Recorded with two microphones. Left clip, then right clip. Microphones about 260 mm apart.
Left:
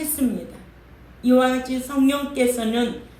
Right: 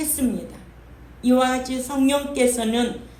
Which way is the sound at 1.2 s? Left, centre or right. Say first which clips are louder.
Left 1 dB; right.